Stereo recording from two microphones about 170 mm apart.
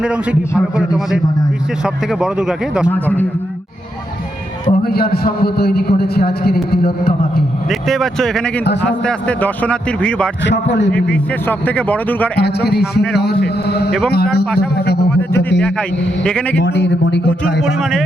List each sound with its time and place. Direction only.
0.0 s a man's voice: 5° right (ahead or behind)
2.9 s a man's voice: 10° left (ahead or behind)
4.8 s a man's voice: 65° left (ahead or behind)
7.7 s a man's voice: centre (ahead or behind)
10.4 s a man's voice: 90° left
11.1 s a man's voice: 10° left (ahead or behind)
12.4 s a man's voice: 70° left (ahead or behind)
16.2 s speech: 5° left (ahead or behind)
16.6 s a man's voice: 90° left
17.6 s speech: centre (ahead or behind)